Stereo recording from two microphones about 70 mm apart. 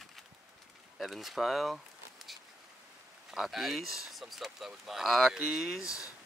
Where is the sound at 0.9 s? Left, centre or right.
Centre.